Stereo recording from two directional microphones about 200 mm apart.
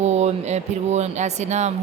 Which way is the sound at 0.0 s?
35° right (ahead or behind).